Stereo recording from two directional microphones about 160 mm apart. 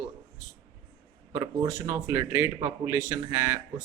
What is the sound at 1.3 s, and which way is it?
A man's voice, 25° right (ahead or behind).